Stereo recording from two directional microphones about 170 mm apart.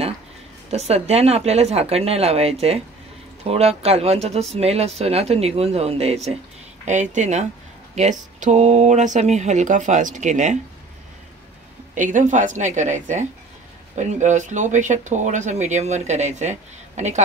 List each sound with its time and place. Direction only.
0.7 s speech: 40° right (ahead or behind)
11.9 s speech: 50° right (ahead or behind)